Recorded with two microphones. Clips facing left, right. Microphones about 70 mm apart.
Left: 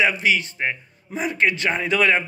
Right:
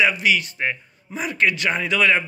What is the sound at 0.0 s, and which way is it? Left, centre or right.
A man's voice, left.